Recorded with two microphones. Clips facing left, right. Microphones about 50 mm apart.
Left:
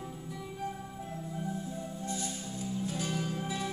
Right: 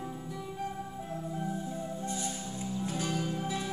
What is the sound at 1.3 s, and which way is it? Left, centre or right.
Music, centre.